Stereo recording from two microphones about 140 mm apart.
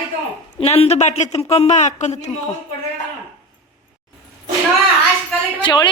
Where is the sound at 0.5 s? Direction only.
50° left (ahead or behind).